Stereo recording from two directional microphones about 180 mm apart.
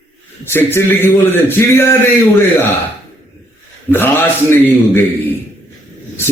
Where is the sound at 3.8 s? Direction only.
10° left (ahead or behind).